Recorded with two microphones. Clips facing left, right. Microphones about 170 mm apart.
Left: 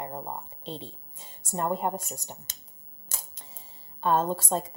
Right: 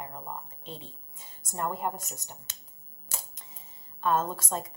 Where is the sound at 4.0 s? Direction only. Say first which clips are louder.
Left 3 dB; 30° left (ahead or behind).